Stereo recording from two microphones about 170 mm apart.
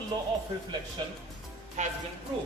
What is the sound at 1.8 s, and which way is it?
Speech, 45° right (ahead or behind).